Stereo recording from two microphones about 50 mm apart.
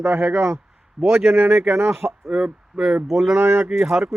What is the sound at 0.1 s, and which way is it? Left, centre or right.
Speech, right.